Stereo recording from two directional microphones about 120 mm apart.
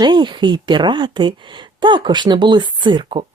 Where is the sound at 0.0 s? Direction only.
40° right (ahead or behind).